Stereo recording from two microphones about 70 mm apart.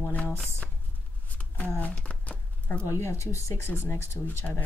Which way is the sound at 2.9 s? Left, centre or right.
Left.